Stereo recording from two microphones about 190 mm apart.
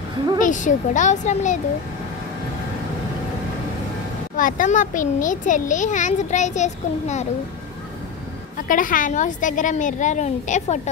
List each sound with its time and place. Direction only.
0.4 s a child's voice: 40° left (ahead or behind)
4.4 s a child's voice: 45° left (ahead or behind)
8.6 s a child's voice: 45° left (ahead or behind)